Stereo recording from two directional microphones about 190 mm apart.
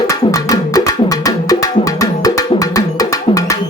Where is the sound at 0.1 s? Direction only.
15° left (ahead or behind).